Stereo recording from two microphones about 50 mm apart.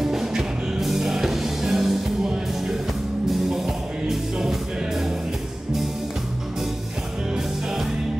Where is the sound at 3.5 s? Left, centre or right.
Centre.